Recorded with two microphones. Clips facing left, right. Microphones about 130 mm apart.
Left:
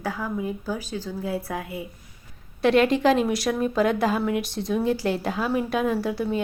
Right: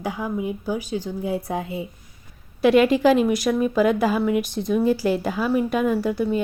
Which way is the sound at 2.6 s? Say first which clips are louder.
Right 3 dB; 5° right (ahead or behind).